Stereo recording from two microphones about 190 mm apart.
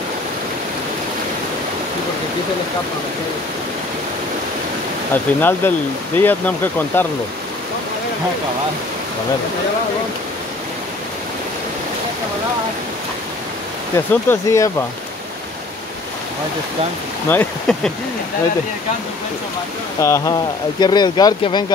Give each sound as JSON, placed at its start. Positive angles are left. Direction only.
{"t": 5.1, "sound": "speech", "side_deg": 10}
{"t": 13.9, "sound": "speech", "side_deg": 15}
{"t": 17.3, "sound": "speech", "side_deg": 10}
{"t": 20.0, "sound": "speech", "side_deg": 15}